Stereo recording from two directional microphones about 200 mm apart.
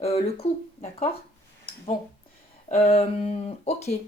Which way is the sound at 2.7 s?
30° left (ahead or behind).